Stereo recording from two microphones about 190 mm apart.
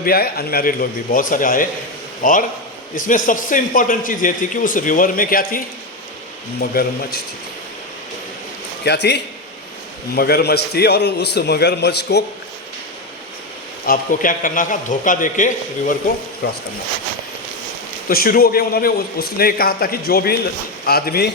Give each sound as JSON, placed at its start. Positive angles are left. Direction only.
{"t": 0.0, "sound": "a man's voice", "side_deg": 55}
{"t": 8.8, "sound": "a man's voice", "side_deg": 60}
{"t": 13.8, "sound": "a man's voice", "side_deg": 45}
{"t": 16.4, "sound": "a man's voice", "side_deg": 55}
{"t": 18.1, "sound": "a man's voice", "side_deg": 50}